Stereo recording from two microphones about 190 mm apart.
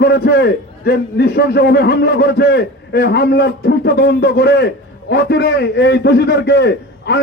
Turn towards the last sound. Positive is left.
turn(degrees=65)  # may be behind; listen again after turning